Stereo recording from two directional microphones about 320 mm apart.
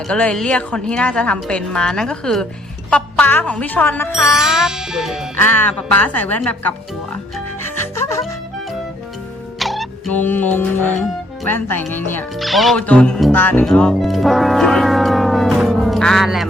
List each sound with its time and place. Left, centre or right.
0.1 s speech: centre
7.9 s music: centre
9.6 s music: centre
11.4 s speech: centre